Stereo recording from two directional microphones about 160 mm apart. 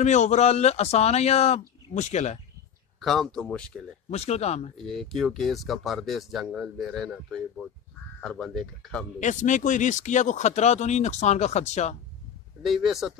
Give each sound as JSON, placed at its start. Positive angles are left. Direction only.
{"t": 0.0, "sound": "speech", "side_deg": 45}
{"t": 3.0, "sound": "speech", "side_deg": 0}
{"t": 4.1, "sound": "speech", "side_deg": 40}
{"t": 4.7, "sound": "speech", "side_deg": 0}
{"t": 9.2, "sound": "speech", "side_deg": 50}
{"t": 12.6, "sound": "speech", "side_deg": 0}